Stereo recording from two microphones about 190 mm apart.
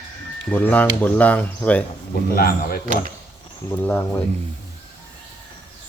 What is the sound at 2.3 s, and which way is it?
Speech, 50° left (ahead or behind).